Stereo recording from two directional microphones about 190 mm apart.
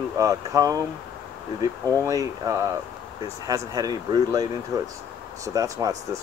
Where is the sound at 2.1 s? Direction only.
15° right (ahead or behind).